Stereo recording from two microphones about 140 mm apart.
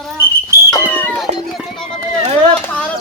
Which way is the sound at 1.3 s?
55° right (ahead or behind).